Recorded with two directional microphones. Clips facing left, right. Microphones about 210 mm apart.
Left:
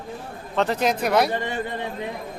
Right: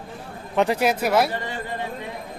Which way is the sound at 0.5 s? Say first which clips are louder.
Right 2 dB; 10° right (ahead or behind).